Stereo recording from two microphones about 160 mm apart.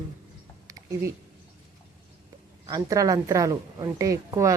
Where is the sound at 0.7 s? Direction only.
20° right (ahead or behind).